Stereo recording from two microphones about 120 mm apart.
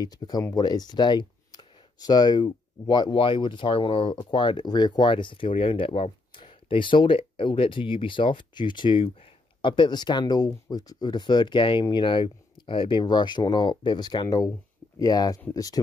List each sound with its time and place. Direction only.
0.0 s speech: 35° left (ahead or behind)